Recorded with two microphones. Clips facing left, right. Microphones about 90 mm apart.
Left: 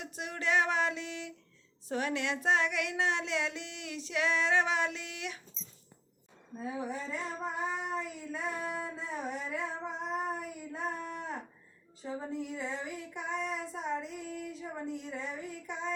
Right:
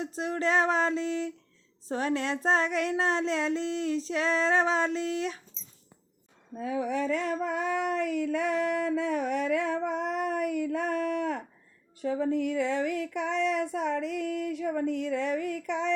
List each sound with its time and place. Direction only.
0.0 s child singing: 35° right (ahead or behind)
6.6 s a sound: 70° right (ahead or behind)
12.0 s child singing: 75° right (ahead or behind)